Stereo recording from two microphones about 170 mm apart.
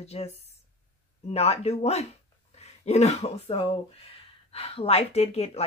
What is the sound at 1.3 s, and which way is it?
Speech, 40° left (ahead or behind).